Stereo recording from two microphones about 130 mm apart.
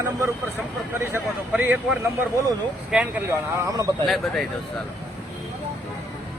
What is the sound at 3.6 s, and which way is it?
Speech, 25° right (ahead or behind).